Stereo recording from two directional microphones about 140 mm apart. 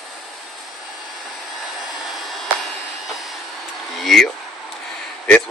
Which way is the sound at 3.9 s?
Centre (ahead or behind).